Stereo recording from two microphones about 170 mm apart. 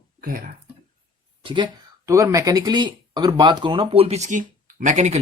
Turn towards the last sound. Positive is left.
turn(degrees=-45)  # may be behind; listen again after turning